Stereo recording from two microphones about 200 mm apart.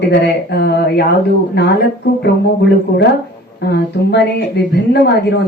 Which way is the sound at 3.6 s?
55° left (ahead or behind).